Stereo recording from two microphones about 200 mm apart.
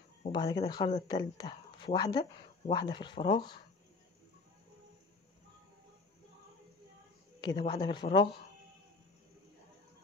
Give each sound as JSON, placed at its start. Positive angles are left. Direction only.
{"t": 0.3, "sound": "speech", "side_deg": 20}
{"t": 7.3, "sound": "a man's voice", "side_deg": 20}